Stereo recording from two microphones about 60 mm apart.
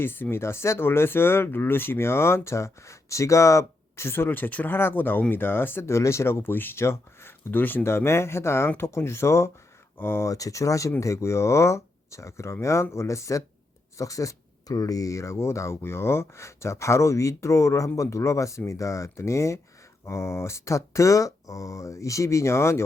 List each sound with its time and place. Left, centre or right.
0.0 s speech: left
7.9 s speech: left
10.0 s speech: left
10.2 s speech: left